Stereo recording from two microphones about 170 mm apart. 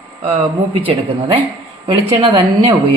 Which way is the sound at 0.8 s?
30° right (ahead or behind).